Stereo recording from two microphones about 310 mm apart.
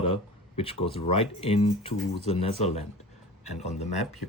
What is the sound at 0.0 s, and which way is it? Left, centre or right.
Speech, centre.